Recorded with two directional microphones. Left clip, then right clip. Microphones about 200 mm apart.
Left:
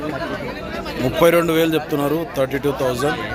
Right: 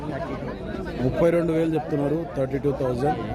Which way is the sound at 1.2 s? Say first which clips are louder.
Left 7 dB; centre (ahead or behind).